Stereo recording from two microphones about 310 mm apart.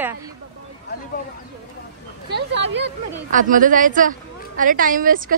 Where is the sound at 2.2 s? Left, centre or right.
Right.